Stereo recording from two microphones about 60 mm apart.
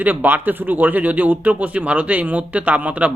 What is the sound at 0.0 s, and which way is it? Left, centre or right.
Speech, right.